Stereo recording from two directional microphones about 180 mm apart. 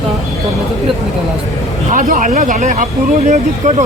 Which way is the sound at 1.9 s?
45° right (ahead or behind).